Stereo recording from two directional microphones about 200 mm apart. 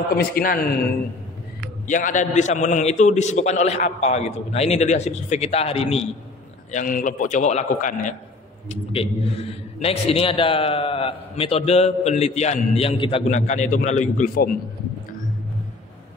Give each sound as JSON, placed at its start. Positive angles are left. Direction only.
{"t": 0.2, "sound": "a man's voice", "side_deg": 45}
{"t": 1.9, "sound": "a man's voice", "side_deg": 40}
{"t": 6.7, "sound": "a man's voice", "side_deg": 40}